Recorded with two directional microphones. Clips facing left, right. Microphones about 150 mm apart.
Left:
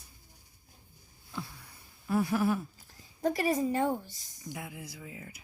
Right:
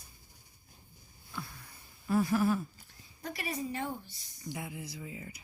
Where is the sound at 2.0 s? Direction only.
10° left (ahead or behind).